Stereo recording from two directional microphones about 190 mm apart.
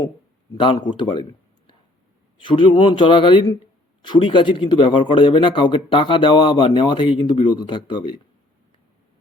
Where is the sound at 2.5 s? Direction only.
25° left (ahead or behind).